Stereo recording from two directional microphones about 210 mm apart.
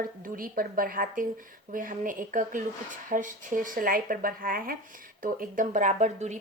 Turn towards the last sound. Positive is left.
turn(degrees=-35)  # may be behind; listen again after turning